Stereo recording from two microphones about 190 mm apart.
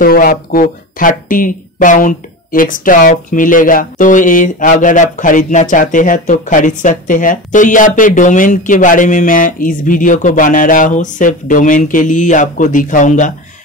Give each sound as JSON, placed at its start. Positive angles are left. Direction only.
{"t": 0.0, "sound": "speech", "side_deg": 50}